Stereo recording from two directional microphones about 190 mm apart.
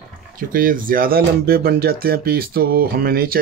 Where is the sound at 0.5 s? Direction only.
50° right (ahead or behind).